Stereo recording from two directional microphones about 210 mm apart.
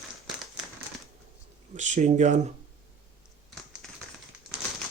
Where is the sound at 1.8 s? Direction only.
35° right (ahead or behind).